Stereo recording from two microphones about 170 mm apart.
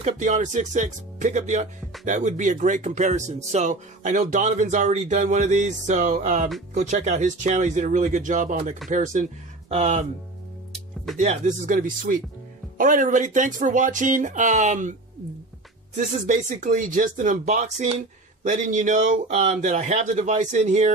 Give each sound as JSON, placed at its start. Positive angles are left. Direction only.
{"t": 0.0, "sound": "speech", "side_deg": -45}
{"t": 11.1, "sound": "speech", "side_deg": -45}
{"t": 16.3, "sound": "speech", "side_deg": -50}